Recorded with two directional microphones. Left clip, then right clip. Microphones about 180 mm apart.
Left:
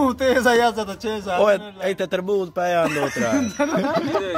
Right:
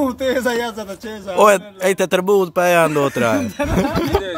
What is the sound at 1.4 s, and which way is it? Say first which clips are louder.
Speech: right 7 dB; 40° right (ahead or behind).